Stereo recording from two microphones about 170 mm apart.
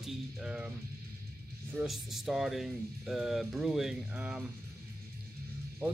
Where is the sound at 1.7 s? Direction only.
5° right (ahead or behind).